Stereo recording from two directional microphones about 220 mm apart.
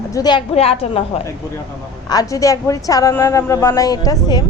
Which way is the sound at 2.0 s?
15° left (ahead or behind).